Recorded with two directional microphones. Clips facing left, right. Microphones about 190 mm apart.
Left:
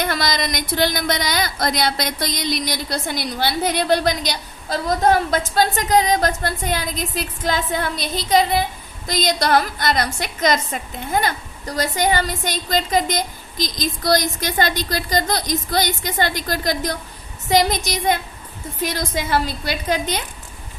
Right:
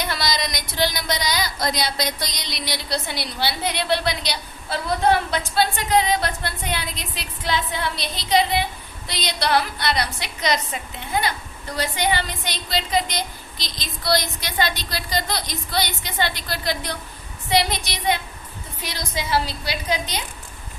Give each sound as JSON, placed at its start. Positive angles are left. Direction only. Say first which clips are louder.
{"t": 0.0, "sound": "speech", "louder": "left 4 dB", "side_deg": 50}